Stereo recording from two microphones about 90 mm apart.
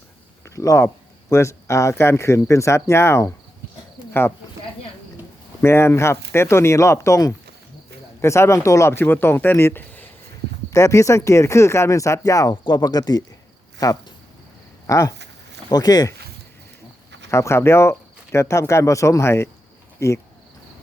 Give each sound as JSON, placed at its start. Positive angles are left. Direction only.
{"t": 0.4, "sound": "speech", "side_deg": 35}
{"t": 5.6, "sound": "speech", "side_deg": 30}
{"t": 10.7, "sound": "speech", "side_deg": 35}
{"t": 14.8, "sound": "speech", "side_deg": 35}
{"t": 17.3, "sound": "speech", "side_deg": 30}